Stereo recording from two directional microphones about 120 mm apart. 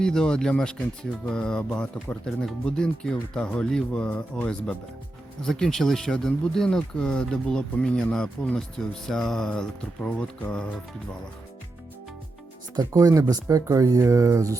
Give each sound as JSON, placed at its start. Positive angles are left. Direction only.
{"t": 0.0, "sound": "speech", "side_deg": 5}
{"t": 12.7, "sound": "speech", "side_deg": -30}